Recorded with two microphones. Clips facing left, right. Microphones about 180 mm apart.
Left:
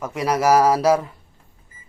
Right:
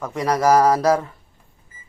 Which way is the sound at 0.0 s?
10° left (ahead or behind).